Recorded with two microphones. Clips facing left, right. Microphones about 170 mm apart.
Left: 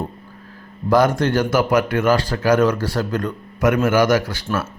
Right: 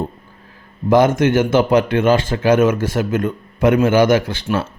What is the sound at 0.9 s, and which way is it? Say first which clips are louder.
Speech: right 3 dB; 20° right (ahead or behind).